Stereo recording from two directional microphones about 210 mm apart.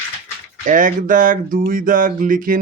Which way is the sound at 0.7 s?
40° right (ahead or behind).